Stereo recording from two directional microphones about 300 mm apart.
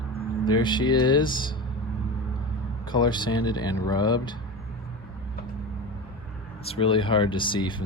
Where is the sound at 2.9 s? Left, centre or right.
Centre.